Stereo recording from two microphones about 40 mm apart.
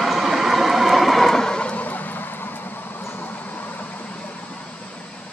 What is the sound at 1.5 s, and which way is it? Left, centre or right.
Horse, left.